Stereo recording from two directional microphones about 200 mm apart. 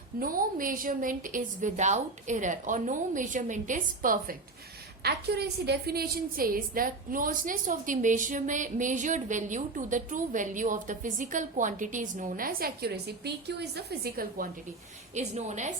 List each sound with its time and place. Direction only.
0.2 s a woman's voice: 45° right (ahead or behind)
5.0 s a woman's voice: 55° right (ahead or behind)
15.1 s a woman's voice: 35° right (ahead or behind)